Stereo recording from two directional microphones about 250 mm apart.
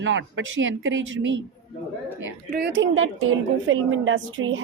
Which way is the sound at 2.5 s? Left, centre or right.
Right.